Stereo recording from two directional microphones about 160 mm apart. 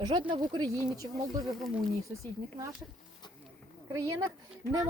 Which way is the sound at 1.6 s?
Centre (ahead or behind).